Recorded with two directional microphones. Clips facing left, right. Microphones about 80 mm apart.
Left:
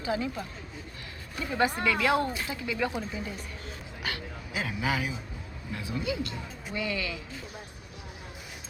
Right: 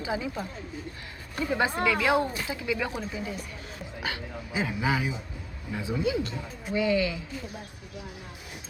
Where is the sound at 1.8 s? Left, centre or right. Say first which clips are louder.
Right 2 dB; centre.